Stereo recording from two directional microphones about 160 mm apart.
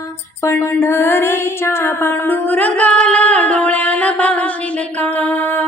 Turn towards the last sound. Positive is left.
turn(degrees=10)  # may be behind; listen again after turning